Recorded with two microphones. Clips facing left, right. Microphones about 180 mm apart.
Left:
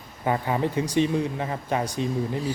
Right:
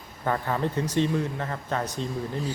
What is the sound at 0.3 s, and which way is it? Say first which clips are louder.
Speech: left 2 dB; 15° left (ahead or behind).